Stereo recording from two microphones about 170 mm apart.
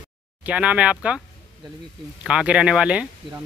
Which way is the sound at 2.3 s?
5° right (ahead or behind).